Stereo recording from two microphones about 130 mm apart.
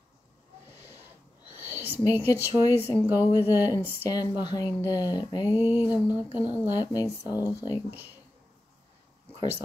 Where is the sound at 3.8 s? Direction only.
15° left (ahead or behind).